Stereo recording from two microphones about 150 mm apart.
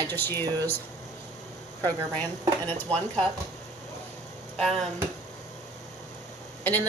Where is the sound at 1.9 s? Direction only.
10° left (ahead or behind).